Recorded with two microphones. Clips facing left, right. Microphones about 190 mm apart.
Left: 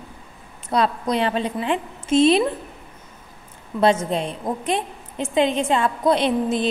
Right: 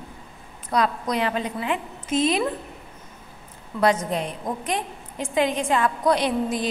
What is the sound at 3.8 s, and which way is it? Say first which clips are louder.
A woman's voice: left 3 dB; 25° left (ahead or behind).